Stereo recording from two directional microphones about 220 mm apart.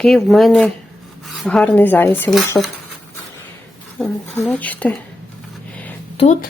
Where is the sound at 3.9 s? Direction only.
5° left (ahead or behind).